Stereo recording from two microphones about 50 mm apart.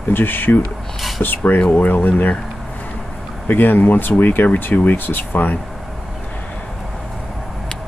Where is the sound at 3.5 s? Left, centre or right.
Left.